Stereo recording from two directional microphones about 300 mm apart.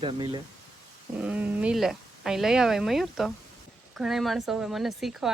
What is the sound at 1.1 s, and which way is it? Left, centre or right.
Speech, centre.